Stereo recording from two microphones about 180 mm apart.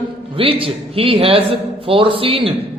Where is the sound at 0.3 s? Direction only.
30° right (ahead or behind).